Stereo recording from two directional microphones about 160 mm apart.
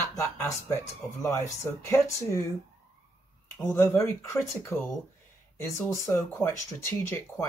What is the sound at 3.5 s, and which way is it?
Speech, 15° left (ahead or behind).